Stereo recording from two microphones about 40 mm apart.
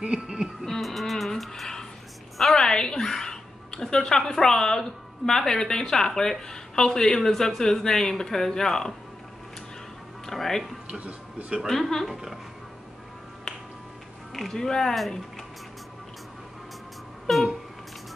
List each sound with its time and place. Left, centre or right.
0.0 s a sound: right
0.7 s music: centre
2.5 s a sound: centre
3.8 s a woman's voice: centre
10.2 s speech: centre
10.9 s speech: right
11.7 s a woman's voice: centre
12.1 s speech: centre
14.5 s a woman's voice: centre
17.3 s a sound: centre